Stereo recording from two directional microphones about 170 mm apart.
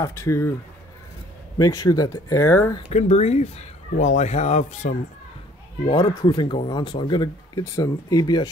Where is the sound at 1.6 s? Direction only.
20° left (ahead or behind).